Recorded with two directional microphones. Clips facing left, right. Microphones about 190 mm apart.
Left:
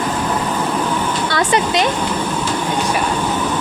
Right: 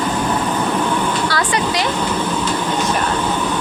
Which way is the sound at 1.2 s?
25° left (ahead or behind).